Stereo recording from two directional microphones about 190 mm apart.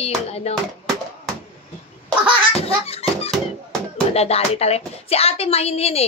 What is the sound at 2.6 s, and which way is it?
Music, 30° left (ahead or behind).